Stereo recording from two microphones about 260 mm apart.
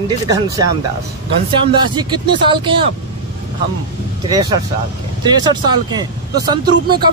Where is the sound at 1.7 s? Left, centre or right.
Centre.